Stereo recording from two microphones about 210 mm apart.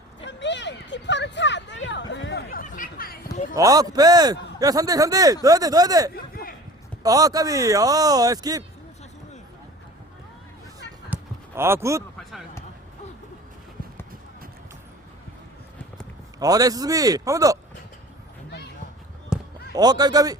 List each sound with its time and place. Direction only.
0.2 s a sound: 60° left (ahead or behind); by 3.5 s 40° left (ahead or behind)
3.5 s a man's voice: 15° right (ahead or behind)
6.1 s a sound: 45° left (ahead or behind)
7.0 s a man's voice: 15° right (ahead or behind)
11.1 s basketball bounce: 10° right (ahead or behind)
16.4 s a man's voice: 15° right (ahead or behind)
19.3 s basketball bounce: 5° right (ahead or behind)
19.7 s a man's voice: 20° right (ahead or behind)